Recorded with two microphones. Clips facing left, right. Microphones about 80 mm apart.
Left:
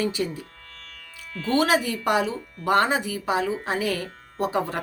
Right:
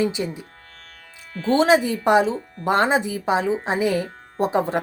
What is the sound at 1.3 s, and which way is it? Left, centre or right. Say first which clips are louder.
Speech: right 5 dB; right.